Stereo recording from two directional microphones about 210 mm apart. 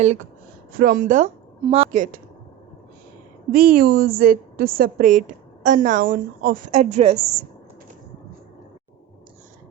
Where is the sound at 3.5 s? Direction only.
45° right (ahead or behind).